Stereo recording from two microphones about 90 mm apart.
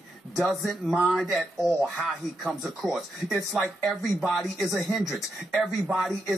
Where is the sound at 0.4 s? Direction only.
Centre (ahead or behind).